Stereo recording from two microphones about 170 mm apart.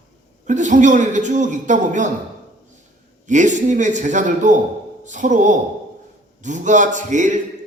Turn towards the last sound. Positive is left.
turn(degrees=-45)  # may be behind; listen again after turning